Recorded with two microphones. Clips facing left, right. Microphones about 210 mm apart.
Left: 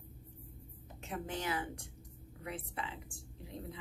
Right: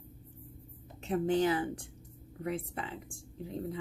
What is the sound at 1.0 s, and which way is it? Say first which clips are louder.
Speech: right 11 dB; 35° right (ahead or behind).